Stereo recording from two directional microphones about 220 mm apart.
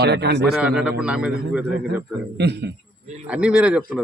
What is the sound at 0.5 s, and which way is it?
Speech, 5° right (ahead or behind).